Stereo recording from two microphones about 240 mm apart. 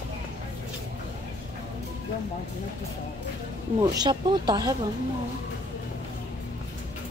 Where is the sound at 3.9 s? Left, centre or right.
Centre.